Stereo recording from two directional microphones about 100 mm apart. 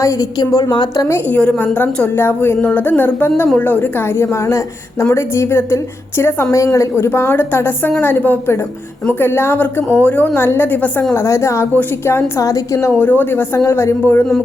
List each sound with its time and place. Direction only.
0.0 s a woman's voice: 35° left (ahead or behind)
1.3 s a woman's voice: 15° left (ahead or behind); by 12.9 s 30° left (ahead or behind)
13.0 s a woman's voice: 20° left (ahead or behind)